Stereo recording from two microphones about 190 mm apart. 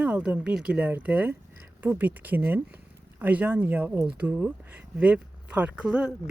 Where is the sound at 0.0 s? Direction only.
5° right (ahead or behind).